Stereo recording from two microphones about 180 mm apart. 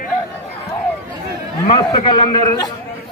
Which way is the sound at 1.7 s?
30° left (ahead or behind).